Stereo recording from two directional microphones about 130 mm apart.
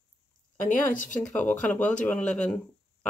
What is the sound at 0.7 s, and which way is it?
Speech, 80° left.